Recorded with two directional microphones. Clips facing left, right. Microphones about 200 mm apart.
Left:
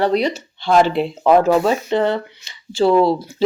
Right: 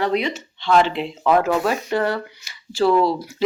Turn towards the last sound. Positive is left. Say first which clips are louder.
# left 4 dB
turn(degrees=25)  # may be behind; listen again after turning